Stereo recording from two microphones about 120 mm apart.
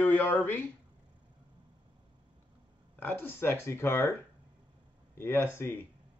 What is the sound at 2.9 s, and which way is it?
Speech, 15° left (ahead or behind).